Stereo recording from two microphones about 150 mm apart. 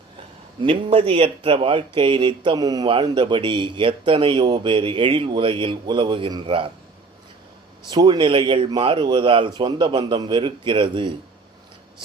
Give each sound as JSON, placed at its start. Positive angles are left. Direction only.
{"t": 0.6, "sound": "speech", "side_deg": -35}
{"t": 7.9, "sound": "speech", "side_deg": -25}